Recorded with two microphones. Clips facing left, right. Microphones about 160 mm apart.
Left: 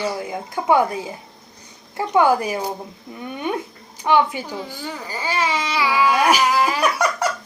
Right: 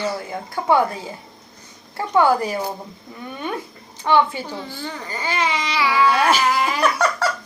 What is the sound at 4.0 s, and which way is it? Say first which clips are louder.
Speech: even; 15° left (ahead or behind).